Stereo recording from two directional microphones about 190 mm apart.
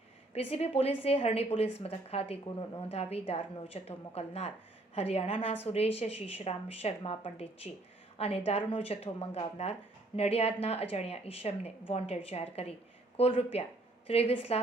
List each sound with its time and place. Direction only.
0.5 s a woman's voice: 30° left (ahead or behind)